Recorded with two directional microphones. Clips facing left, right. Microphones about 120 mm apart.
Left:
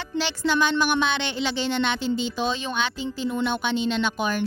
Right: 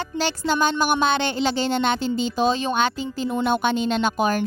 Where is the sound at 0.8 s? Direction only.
40° right (ahead or behind).